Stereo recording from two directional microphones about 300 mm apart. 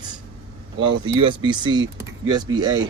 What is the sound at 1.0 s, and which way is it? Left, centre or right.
Speech, centre.